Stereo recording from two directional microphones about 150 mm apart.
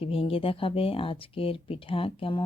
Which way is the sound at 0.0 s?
40° left (ahead or behind).